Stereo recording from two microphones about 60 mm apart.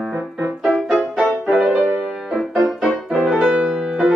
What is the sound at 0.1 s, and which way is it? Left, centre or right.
Music, right.